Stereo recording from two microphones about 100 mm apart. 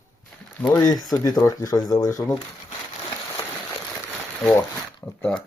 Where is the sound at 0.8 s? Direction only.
35° left (ahead or behind).